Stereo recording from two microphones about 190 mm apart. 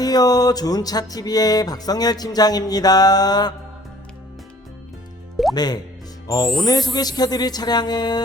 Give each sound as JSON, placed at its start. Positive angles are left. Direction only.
{"t": 0.0, "sound": "music", "side_deg": 20}
{"t": 5.5, "sound": "music", "side_deg": 20}
{"t": 6.2, "sound": "speech", "side_deg": 20}
{"t": 6.7, "sound": "music", "side_deg": 20}